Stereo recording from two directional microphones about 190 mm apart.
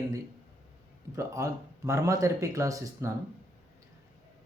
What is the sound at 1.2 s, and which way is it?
Speech, 15° right (ahead or behind).